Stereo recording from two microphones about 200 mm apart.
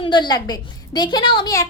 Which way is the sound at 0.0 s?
20° left (ahead or behind).